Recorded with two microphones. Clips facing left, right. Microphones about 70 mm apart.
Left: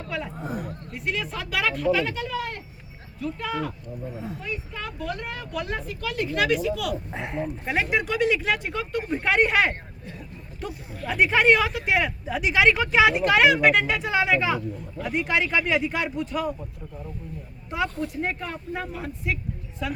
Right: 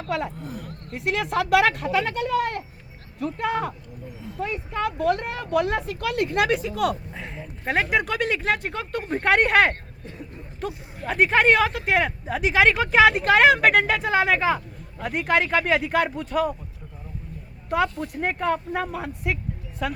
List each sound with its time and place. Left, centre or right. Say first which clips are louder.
0.3 s speech: left 4 dB; left
0.9 s speech: right 6 dB; right
7.7 s speech: right 3 dB; right
9.2 s speech: right 3 dB; right
10.7 s speech: even; right
17.7 s speech: right 4 dB; right